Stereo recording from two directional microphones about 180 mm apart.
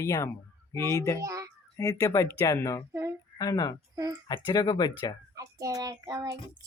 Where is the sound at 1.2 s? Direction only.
20° right (ahead or behind).